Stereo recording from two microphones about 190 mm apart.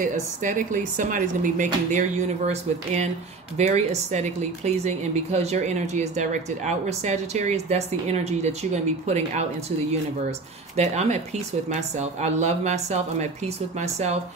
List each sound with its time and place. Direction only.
0.0 s a woman's voice: 45° right (ahead or behind)
10.8 s a woman's voice: 35° right (ahead or behind)